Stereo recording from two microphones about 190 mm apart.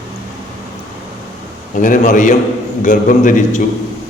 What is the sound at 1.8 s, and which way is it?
A man's voice, 45° left (ahead or behind).